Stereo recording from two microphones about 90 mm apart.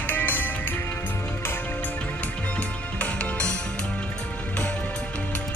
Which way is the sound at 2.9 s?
15° left (ahead or behind).